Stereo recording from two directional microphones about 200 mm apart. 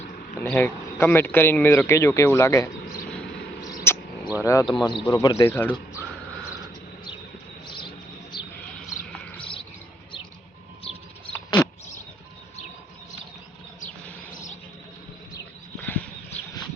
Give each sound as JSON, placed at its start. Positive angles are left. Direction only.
{"t": 0.4, "sound": "speech", "side_deg": 10}
{"t": 3.9, "sound": "a sound", "side_deg": 10}
{"t": 4.4, "sound": "speech", "side_deg": 15}
{"t": 9.1, "sound": "bird", "side_deg": 5}
{"t": 11.3, "sound": "a sound", "side_deg": 10}
{"t": 15.8, "sound": "horse", "side_deg": 10}